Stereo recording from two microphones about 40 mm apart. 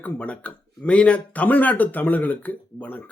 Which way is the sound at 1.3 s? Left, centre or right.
Left.